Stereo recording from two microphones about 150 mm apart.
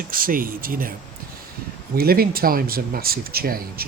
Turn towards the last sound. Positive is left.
turn(degrees=-85)